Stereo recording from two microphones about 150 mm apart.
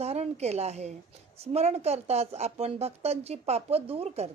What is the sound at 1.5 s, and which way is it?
Speech, 45° right (ahead or behind).